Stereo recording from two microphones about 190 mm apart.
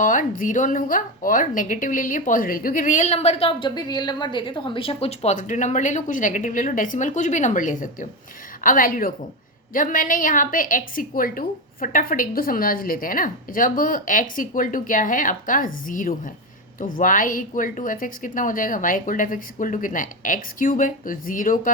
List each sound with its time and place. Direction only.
0.0 s a woman's voice: 45° left (ahead or behind)